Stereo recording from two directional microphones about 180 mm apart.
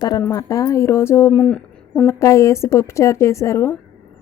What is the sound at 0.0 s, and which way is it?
Speech, 20° left (ahead or behind).